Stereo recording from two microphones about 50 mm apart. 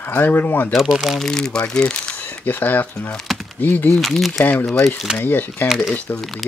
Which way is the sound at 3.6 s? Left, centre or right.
Left.